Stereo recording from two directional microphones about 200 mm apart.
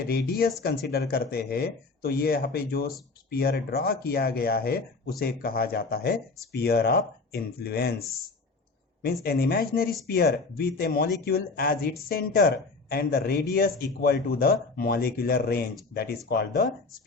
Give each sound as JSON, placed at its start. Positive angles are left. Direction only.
{"t": 0.1, "sound": "speech", "side_deg": 50}
{"t": 9.2, "sound": "speech", "side_deg": 50}